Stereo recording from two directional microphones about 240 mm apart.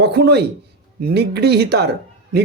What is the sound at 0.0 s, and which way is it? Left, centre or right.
Speech, right.